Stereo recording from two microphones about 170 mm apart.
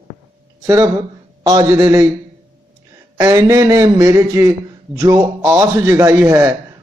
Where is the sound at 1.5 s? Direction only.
20° right (ahead or behind).